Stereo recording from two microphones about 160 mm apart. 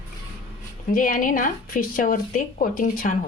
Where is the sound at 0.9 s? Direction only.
60° left (ahead or behind).